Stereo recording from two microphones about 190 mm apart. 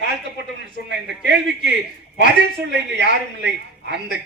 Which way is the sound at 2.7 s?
65° right (ahead or behind).